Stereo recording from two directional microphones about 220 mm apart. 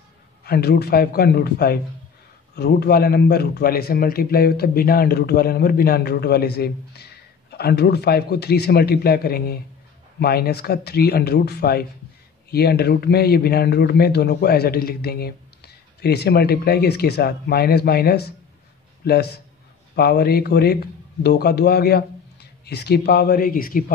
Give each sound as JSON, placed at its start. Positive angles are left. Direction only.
{"t": 0.5, "sound": "speech", "side_deg": 45}